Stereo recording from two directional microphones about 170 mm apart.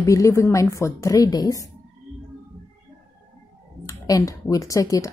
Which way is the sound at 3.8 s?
20° left (ahead or behind).